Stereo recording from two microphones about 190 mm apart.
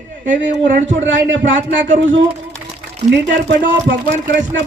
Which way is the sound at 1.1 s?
80° right.